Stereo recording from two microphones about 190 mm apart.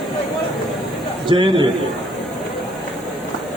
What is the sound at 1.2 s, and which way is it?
Speech, 25° right (ahead or behind).